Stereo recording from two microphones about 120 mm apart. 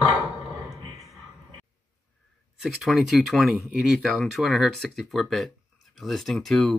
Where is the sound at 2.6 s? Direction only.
Centre (ahead or behind).